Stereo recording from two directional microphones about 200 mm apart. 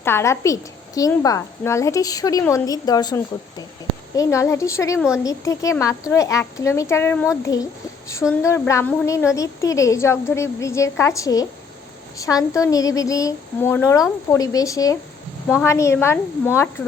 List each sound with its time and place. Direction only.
0.0 s a woman's voice: 10° left (ahead or behind)
4.9 s a woman's voice: 5° right (ahead or behind)
5.2 s a woman's voice: 15° left (ahead or behind)